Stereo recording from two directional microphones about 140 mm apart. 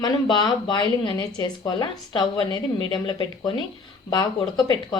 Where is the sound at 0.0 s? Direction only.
30° left (ahead or behind).